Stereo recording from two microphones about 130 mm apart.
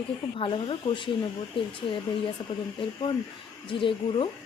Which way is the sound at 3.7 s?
40° left (ahead or behind).